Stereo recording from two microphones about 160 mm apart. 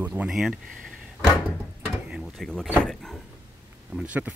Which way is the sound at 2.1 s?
Centre (ahead or behind).